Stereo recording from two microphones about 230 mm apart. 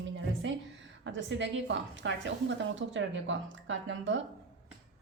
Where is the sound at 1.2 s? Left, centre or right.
Right.